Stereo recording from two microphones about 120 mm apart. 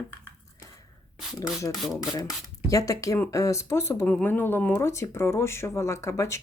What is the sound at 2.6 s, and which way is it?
Speech, 25° left (ahead or behind).